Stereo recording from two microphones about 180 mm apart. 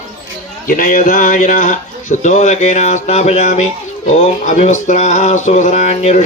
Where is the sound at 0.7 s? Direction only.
45° left (ahead or behind).